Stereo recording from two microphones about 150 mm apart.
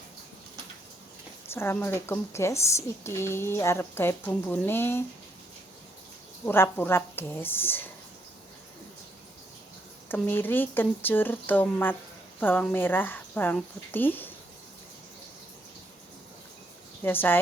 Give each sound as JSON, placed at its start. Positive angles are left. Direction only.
{"t": 1.5, "sound": "a woman's voice", "side_deg": 15}
{"t": 6.4, "sound": "a woman's voice", "side_deg": 15}
{"t": 10.1, "sound": "a woman's voice", "side_deg": 15}
{"t": 17.0, "sound": "a woman's voice", "side_deg": 15}